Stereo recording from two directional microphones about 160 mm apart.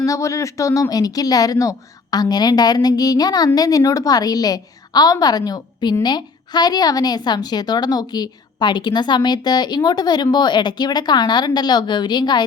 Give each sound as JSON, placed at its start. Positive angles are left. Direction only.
{"t": 0.0, "sound": "a woman's voice", "side_deg": 20}